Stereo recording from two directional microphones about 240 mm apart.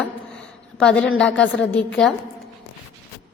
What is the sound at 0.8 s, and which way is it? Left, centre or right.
A woman's voice, centre.